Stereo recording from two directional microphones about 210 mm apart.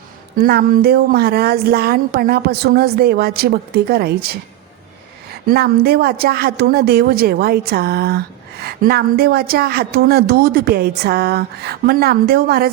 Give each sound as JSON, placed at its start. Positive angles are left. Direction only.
{"t": 0.3, "sound": "speech", "side_deg": -45}
{"t": 5.5, "sound": "speech", "side_deg": -45}